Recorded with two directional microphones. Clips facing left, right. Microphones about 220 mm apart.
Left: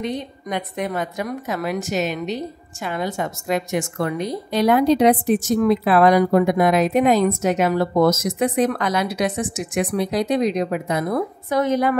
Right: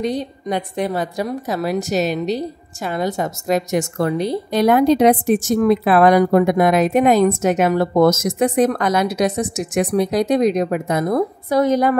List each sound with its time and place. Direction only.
0.0 s a woman's voice: 35° right (ahead or behind)
4.5 s a woman's voice: 50° right (ahead or behind)